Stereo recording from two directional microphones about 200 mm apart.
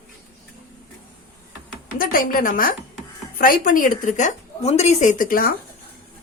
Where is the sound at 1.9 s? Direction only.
45° left (ahead or behind).